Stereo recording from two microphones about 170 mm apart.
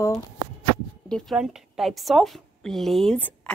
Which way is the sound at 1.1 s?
Centre (ahead or behind).